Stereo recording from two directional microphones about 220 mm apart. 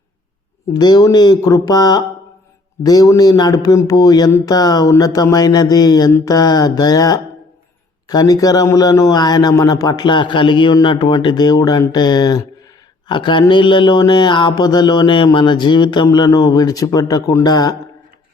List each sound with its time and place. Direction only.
0.7 s a man's voice: 20° left (ahead or behind)